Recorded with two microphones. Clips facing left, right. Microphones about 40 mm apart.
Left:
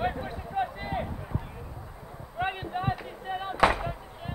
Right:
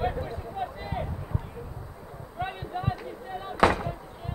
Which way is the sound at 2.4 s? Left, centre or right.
Left.